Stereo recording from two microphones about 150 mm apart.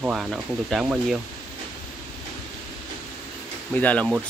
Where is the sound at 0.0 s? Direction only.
5° right (ahead or behind).